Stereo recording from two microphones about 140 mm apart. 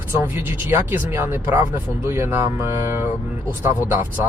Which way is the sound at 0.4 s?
15° right (ahead or behind).